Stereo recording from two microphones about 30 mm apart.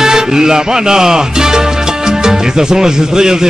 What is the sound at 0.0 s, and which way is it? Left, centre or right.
Music, right.